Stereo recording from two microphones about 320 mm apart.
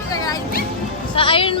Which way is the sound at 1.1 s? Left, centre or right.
Centre.